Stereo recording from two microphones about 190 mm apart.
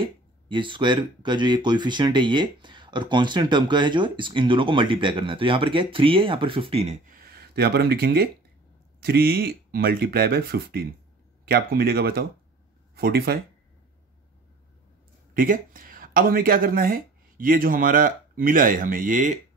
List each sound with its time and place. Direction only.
0.0 s speech: 25° right (ahead or behind)
7.2 s speech: 55° right (ahead or behind)
15.3 s speech: 45° right (ahead or behind)